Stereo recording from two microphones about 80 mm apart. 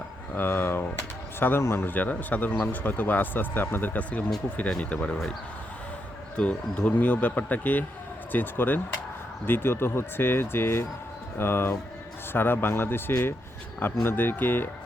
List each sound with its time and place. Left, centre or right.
0.3 s a man's voice: left
6.3 s a man's voice: centre